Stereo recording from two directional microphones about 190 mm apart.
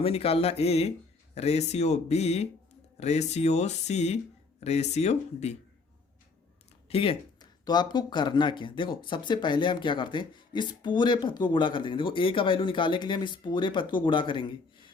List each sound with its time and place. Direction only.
0.0 s speech: 30° left (ahead or behind)
6.9 s speech: 30° left (ahead or behind)